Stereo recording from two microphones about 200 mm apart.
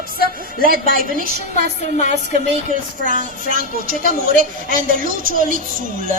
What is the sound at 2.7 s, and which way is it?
A woman's voice, 40° right (ahead or behind).